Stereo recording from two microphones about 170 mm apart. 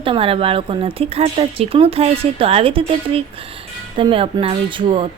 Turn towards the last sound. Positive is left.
turn(degrees=-30)  # may be behind; listen again after turning